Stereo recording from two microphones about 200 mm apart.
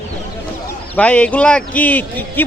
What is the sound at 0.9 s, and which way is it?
Speech, 5° left (ahead or behind).